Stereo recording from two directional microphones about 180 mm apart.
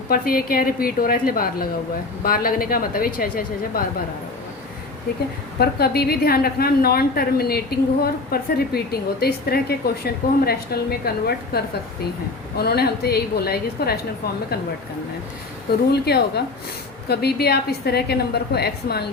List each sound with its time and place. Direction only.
0.1 s speech: 55° left (ahead or behind)
5.5 s a woman's voice: 60° left (ahead or behind)
15.9 s a woman's voice: 65° left (ahead or behind)